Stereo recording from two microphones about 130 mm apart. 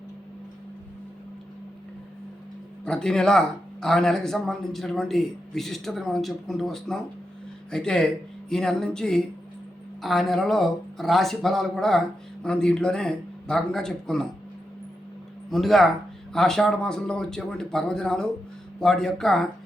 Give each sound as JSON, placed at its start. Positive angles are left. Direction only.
{"t": 2.8, "sound": "speech", "side_deg": 5}
{"t": 15.4, "sound": "speech", "side_deg": 0}